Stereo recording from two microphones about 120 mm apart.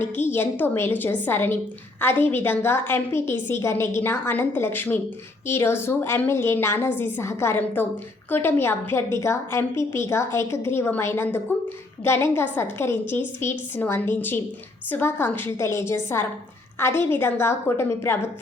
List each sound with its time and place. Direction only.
0.0 s a woman's voice: 15° left (ahead or behind)